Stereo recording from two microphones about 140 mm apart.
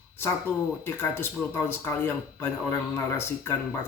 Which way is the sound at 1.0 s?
15° left (ahead or behind).